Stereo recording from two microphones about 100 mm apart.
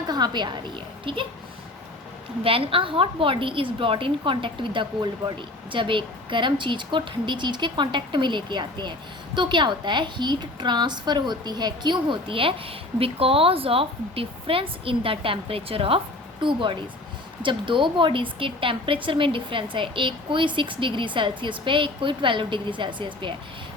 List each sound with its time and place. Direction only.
0.1 s a woman's voice: 45° right (ahead or behind)
2.4 s a woman's voice: 65° right (ahead or behind)
16.4 s a woman's voice: 55° right (ahead or behind)